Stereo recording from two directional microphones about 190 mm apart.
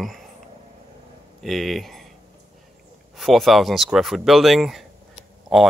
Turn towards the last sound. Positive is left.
turn(degrees=-5)  # may be behind; listen again after turning